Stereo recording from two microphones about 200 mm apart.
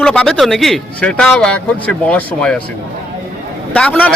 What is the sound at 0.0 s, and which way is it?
A man's voice, 5° left (ahead or behind).